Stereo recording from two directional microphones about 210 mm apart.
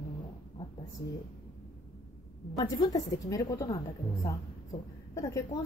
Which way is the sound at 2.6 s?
15° left (ahead or behind).